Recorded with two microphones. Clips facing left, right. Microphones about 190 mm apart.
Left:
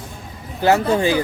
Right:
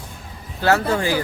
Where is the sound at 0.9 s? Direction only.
20° left (ahead or behind).